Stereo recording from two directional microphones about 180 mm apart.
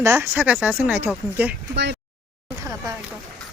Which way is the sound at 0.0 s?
15° right (ahead or behind).